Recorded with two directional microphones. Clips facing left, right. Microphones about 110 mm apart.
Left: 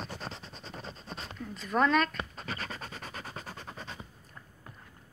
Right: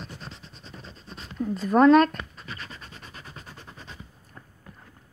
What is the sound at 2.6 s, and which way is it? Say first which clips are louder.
Scratch: left 3 dB; 70° left (ahead or behind).